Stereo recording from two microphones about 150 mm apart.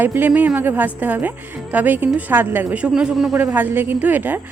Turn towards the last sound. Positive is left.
turn(degrees=-10)  # may be behind; listen again after turning